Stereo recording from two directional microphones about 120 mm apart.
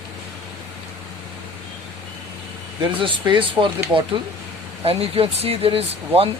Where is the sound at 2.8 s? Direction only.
45° right (ahead or behind).